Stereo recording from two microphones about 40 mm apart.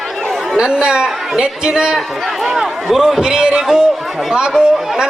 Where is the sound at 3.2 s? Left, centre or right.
Centre.